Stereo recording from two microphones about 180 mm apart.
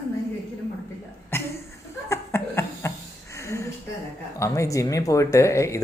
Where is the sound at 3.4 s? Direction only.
15° left (ahead or behind).